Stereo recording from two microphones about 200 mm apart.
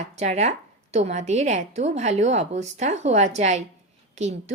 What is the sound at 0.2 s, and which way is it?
A woman's voice, 35° right (ahead or behind).